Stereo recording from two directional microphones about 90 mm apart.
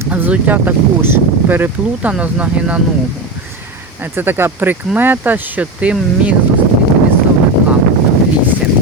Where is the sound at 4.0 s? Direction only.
25° right (ahead or behind).